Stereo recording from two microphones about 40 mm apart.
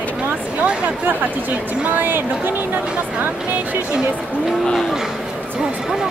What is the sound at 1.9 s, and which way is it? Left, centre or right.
Speech, right.